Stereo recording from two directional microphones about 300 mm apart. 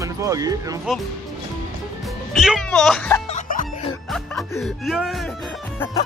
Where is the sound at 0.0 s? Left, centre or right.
Centre.